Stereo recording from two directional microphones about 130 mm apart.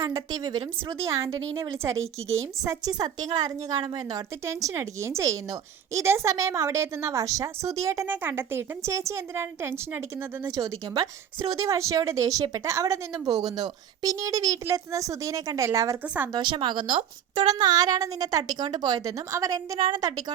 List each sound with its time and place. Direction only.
0.0 s a woman's voice: 30° right (ahead or behind)
16.3 s a woman's voice: 35° right (ahead or behind)